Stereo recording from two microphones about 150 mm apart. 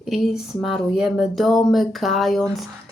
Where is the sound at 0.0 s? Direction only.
Centre (ahead or behind).